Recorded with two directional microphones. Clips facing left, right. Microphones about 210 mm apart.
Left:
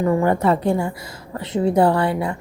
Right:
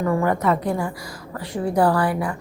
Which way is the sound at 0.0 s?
25° left (ahead or behind).